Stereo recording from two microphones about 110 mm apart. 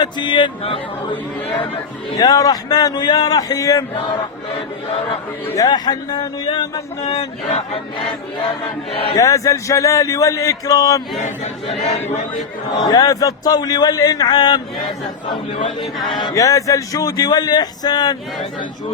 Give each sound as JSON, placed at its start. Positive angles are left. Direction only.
{"t": 0.0, "sound": "speech", "side_deg": 45}
{"t": 2.1, "sound": "speech", "side_deg": 35}
{"t": 5.5, "sound": "speech", "side_deg": 35}
{"t": 7.0, "sound": "speech", "side_deg": 65}
{"t": 9.1, "sound": "a man's voice", "side_deg": 30}
{"t": 11.9, "sound": "speech", "side_deg": 90}
{"t": 12.8, "sound": "speech", "side_deg": 35}
{"t": 16.3, "sound": "speech", "side_deg": 30}